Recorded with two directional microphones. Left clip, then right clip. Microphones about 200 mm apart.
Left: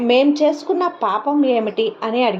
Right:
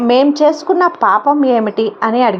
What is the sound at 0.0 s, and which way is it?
Speech, 25° right (ahead or behind).